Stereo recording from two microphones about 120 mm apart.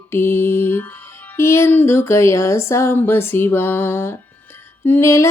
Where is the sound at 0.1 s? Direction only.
20° left (ahead or behind).